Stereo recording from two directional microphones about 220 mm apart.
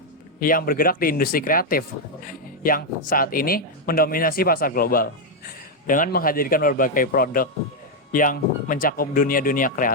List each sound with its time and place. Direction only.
0.3 s speech: 40° left (ahead or behind)